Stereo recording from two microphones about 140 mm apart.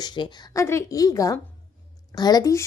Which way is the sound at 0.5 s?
20° left (ahead or behind).